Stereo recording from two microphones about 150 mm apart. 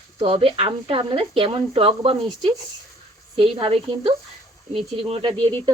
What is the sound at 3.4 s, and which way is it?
Speech, 40° right (ahead or behind).